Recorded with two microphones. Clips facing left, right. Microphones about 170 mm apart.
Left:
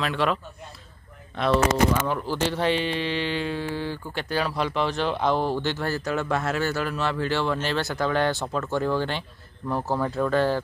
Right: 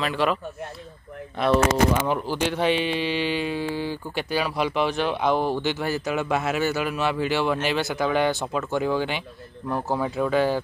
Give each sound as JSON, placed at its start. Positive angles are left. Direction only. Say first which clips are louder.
{"t": 0.0, "sound": "speech", "louder": "right 1 dB", "side_deg": 0}
{"t": 2.0, "sound": "speech", "louder": "right 1 dB", "side_deg": -15}